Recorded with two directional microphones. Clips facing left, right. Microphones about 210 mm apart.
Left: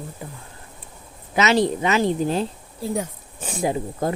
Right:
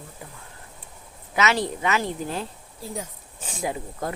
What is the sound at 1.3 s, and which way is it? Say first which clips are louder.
Speech: left 5 dB; 25° left (ahead or behind).